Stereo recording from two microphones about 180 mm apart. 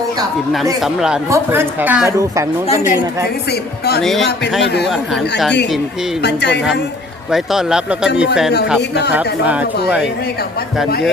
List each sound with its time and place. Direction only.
0.5 s a woman's voice: centre (ahead or behind); by 2.4 s 15° right (ahead or behind)
4.0 s speech: centre (ahead or behind)
4.6 s speech: 65° left (ahead or behind)
6.2 s speech: 70° left (ahead or behind)
7.3 s speech: centre (ahead or behind)
9.1 s a woman's voice: 10° right (ahead or behind)